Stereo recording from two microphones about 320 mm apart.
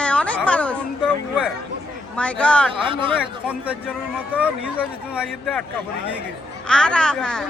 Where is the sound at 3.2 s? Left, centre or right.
Centre.